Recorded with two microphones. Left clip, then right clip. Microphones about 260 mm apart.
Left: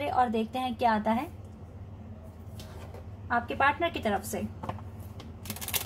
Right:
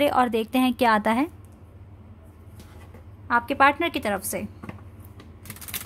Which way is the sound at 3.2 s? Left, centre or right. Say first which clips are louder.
Right 7 dB; right.